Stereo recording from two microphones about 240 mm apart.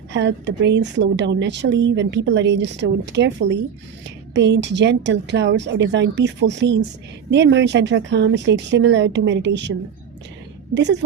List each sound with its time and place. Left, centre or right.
0.1 s a woman's voice: right